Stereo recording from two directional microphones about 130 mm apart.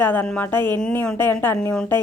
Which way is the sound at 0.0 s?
15° left (ahead or behind).